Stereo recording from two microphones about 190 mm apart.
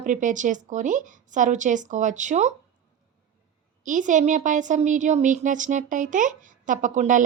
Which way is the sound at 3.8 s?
40° right (ahead or behind).